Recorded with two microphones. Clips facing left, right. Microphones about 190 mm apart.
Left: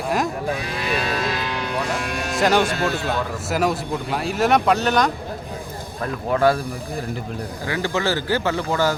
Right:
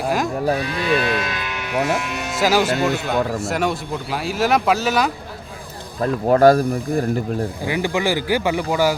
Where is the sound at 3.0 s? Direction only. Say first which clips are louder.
Right 4 dB; centre (ahead or behind).